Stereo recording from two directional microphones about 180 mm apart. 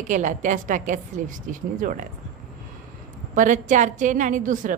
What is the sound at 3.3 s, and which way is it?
A woman's voice, 45° right (ahead or behind).